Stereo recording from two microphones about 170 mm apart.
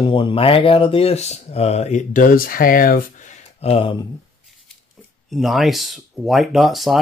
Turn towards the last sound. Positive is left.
turn(degrees=0)  # may be behind; listen again after turning